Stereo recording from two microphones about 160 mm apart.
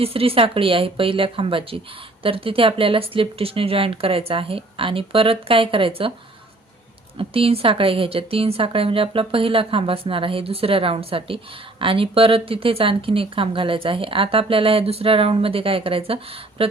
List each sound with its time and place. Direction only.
0.0 s speech: 35° right (ahead or behind)
7.2 s speech: 35° right (ahead or behind)